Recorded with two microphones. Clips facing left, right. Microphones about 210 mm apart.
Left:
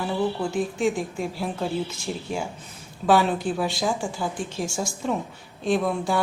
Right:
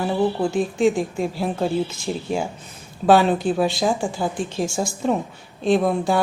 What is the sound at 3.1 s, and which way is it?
Speech, 25° right (ahead or behind).